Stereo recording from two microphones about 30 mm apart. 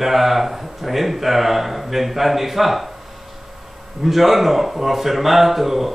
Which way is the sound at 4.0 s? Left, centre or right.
Centre.